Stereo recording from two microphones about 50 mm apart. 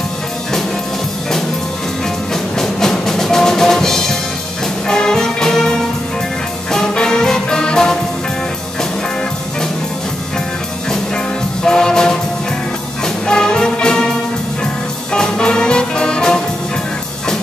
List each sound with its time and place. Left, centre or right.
2.6 s drum: centre
4.8 s music: centre
11.6 s music: centre
15.1 s music: centre